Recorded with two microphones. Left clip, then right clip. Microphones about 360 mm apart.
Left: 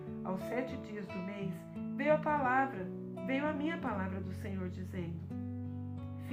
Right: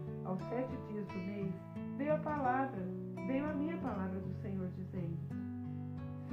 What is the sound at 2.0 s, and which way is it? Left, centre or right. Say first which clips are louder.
Speech: left 5 dB; left.